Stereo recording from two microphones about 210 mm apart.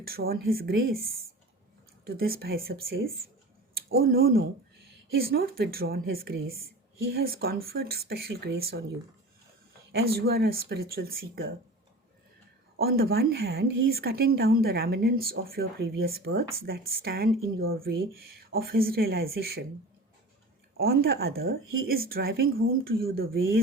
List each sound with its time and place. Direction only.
0.0 s speech: 45° right (ahead or behind)
4.0 s speech: 45° right (ahead or behind)
9.9 s speech: 45° right (ahead or behind)
12.8 s speech: 45° right (ahead or behind)
20.7 s speech: 45° right (ahead or behind)